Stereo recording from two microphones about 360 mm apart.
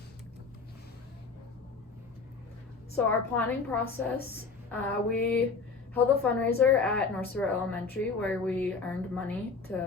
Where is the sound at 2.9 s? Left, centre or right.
Centre.